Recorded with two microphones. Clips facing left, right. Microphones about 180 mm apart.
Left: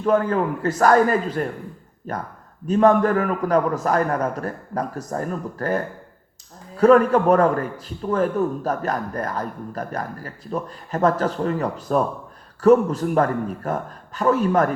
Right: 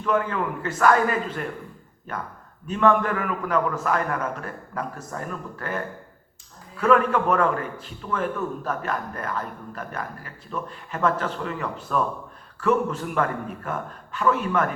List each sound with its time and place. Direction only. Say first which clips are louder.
0.0 s a man's voice: left 5 dB; 40° left (ahead or behind)